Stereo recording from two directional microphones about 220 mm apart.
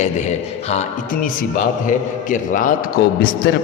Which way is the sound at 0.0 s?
30° left (ahead or behind).